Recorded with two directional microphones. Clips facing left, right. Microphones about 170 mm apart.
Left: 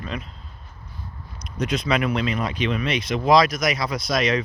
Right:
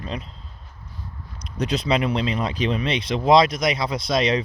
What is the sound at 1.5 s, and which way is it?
Speech, 30° right (ahead or behind).